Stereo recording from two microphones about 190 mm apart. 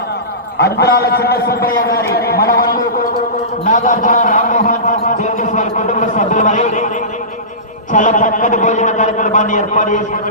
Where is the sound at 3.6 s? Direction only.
40° left (ahead or behind).